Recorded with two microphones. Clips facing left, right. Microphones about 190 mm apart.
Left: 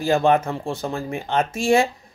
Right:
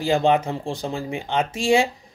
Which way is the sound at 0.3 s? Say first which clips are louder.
Left 1 dB; 15° right (ahead or behind).